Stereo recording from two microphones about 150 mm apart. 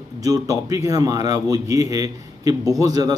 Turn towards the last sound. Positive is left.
turn(degrees=-25)  # may be behind; listen again after turning